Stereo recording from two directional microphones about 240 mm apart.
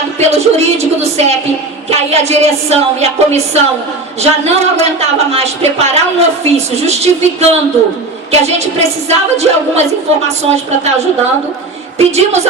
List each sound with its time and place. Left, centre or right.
0.2 s a woman's voice: right
11.9 s a woman's voice: right